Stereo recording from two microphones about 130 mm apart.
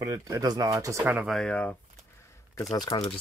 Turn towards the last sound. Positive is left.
turn(degrees=30)  # may be behind; listen again after turning